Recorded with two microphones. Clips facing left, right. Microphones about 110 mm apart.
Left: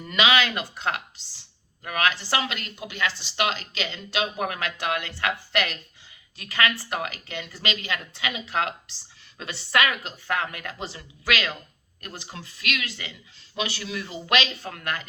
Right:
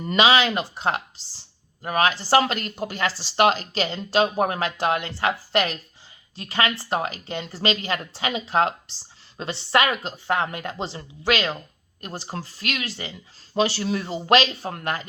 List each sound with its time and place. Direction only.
0.0 s speech: 30° right (ahead or behind)
2.4 s speech: 45° right (ahead or behind)